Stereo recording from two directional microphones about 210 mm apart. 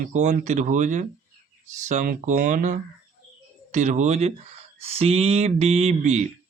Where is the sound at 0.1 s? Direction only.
35° right (ahead or behind).